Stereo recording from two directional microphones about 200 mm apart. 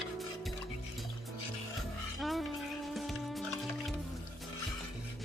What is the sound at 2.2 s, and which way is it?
Music, centre (ahead or behind).